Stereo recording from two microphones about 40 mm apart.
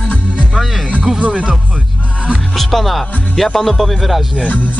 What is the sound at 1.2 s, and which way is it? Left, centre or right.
Speech, right.